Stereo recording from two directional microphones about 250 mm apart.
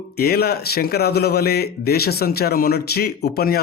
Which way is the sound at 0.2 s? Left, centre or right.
Left.